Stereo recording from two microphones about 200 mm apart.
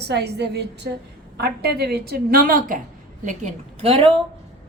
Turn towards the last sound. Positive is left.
turn(degrees=-25)  # may be behind; listen again after turning